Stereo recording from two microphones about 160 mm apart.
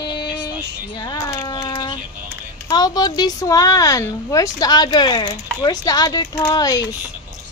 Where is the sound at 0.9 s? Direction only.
25° left (ahead or behind).